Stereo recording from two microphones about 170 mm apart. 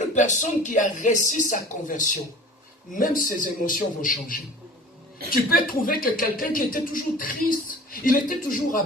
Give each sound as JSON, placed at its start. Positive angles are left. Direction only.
{"t": 0.1, "sound": "speech", "side_deg": 45}